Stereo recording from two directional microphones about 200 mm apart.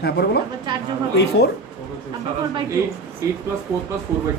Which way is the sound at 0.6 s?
20° right (ahead or behind).